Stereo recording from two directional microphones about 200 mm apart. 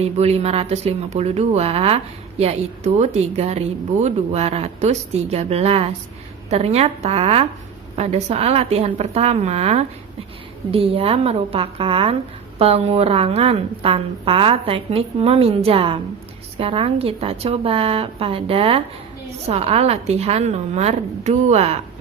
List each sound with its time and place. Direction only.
0.0 s a woman's voice: 30° right (ahead or behind)